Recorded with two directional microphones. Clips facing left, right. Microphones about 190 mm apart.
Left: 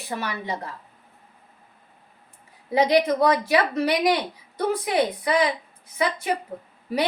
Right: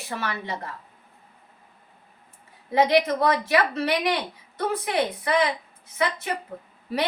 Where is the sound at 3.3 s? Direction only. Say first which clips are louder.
Left 2 dB; 15° left (ahead or behind).